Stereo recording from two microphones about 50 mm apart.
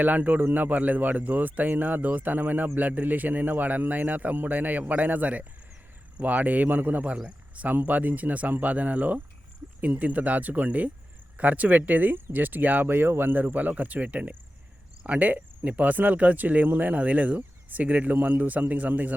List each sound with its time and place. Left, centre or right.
0.0 s speech: right